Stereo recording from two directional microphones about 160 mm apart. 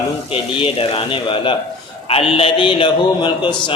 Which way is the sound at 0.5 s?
35° left (ahead or behind).